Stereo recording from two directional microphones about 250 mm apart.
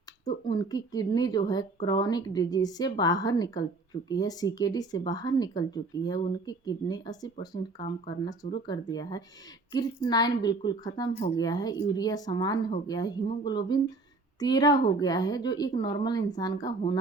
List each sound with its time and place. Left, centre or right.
0.4 s speech: centre